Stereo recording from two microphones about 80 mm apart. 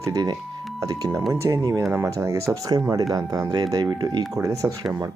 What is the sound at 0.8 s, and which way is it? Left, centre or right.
Speech, right.